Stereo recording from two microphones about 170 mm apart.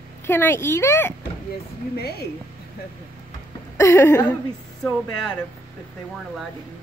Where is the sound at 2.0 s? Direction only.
65° left (ahead or behind).